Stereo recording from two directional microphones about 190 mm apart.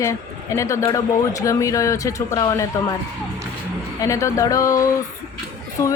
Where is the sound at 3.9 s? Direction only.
15° left (ahead or behind).